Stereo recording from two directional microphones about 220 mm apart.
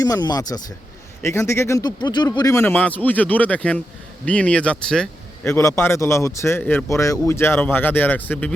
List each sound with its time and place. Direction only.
0.0 s speech: 15° left (ahead or behind)